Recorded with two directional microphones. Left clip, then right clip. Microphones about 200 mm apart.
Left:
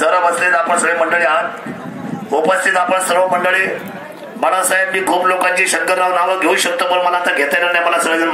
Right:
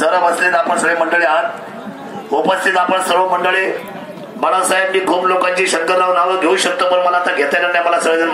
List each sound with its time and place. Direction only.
0.0 s a man's voice: 15° left (ahead or behind); by 8.3 s 60° left (ahead or behind)